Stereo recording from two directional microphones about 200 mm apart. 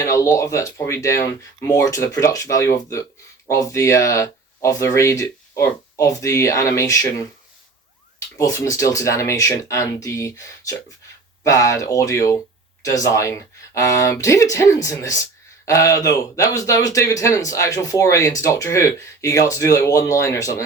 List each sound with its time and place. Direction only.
0.0 s speech: 15° left (ahead or behind)
8.4 s speech: 15° left (ahead or behind)